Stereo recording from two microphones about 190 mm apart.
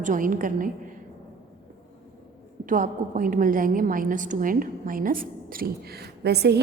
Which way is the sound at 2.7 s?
45° right (ahead or behind).